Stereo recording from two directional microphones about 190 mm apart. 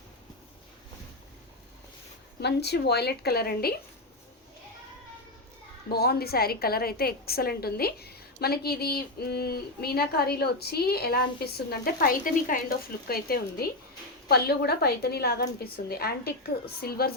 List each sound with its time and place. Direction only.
2.4 s a woman's voice: 60° left (ahead or behind)
5.9 s a woman's voice: 55° left (ahead or behind)